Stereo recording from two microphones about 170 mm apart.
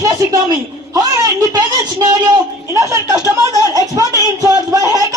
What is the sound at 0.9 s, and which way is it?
A woman's voice, 20° right (ahead or behind).